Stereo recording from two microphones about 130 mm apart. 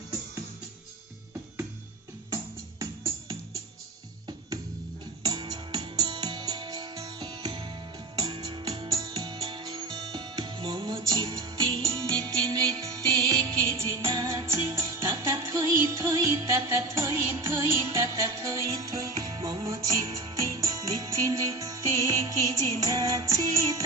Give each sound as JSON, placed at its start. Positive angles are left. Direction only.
{"t": 2.3, "sound": "music", "side_deg": -25}
{"t": 5.2, "sound": "music", "side_deg": -30}
{"t": 11.8, "sound": "music", "side_deg": -30}